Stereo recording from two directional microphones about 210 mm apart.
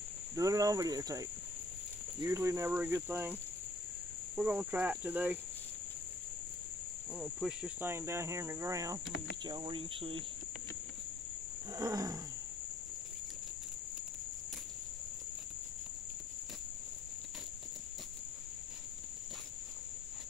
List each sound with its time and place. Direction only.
0.4 s cricket: 15° right (ahead or behind)
4.4 s cricket: 5° right (ahead or behind)
7.2 s cricket: 5° right (ahead or behind); by 10.2 s 25° right (ahead or behind)
11.7 s cricket: 15° right (ahead or behind)